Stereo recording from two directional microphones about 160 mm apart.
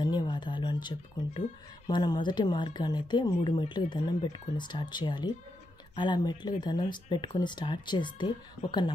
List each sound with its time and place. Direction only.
0.0 s music: 30° left (ahead or behind)
1.9 s speech: 30° left (ahead or behind)